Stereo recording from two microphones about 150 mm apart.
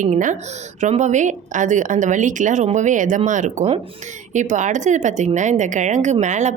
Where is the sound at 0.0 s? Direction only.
60° right (ahead or behind).